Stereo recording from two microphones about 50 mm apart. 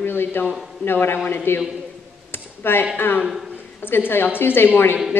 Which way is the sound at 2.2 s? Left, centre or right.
Left.